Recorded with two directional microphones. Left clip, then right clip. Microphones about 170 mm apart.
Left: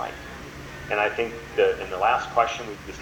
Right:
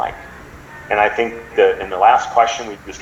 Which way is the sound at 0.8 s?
70° right (ahead or behind).